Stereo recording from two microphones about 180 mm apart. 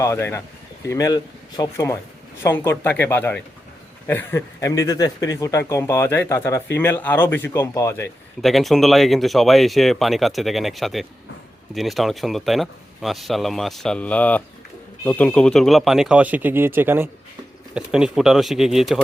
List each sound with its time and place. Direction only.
0.0 s speech: 15° left (ahead or behind)
8.4 s speech: centre (ahead or behind)